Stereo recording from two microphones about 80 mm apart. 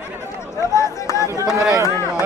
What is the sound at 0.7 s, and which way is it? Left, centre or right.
Speech, left.